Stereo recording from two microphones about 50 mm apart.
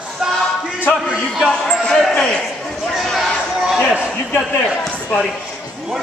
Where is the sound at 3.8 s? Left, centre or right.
Right.